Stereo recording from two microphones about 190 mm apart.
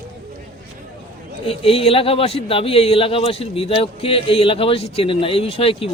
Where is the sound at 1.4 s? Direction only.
30° left (ahead or behind).